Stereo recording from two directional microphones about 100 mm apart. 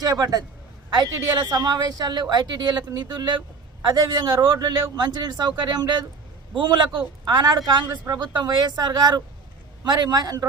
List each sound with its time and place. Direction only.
0.0 s a man's voice: 40° right (ahead or behind)
7.9 s a man's voice: 30° right (ahead or behind)
8.2 s a man's voice: 45° right (ahead or behind)